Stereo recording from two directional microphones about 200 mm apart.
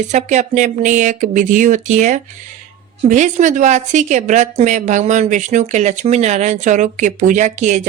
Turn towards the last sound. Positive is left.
turn(degrees=-35)  # may be behind; listen again after turning